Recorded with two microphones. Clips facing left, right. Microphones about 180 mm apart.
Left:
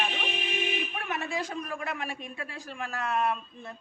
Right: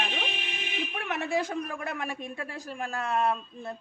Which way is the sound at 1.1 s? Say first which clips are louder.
Right 5 dB; 60° right (ahead or behind).